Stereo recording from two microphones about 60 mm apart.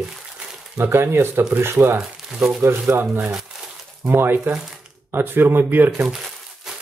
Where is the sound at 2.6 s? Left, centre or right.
Right.